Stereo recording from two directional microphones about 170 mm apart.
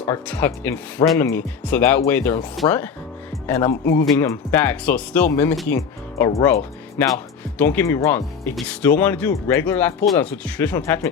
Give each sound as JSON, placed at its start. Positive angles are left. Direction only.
{"t": 0.0, "sound": "speech", "side_deg": 10}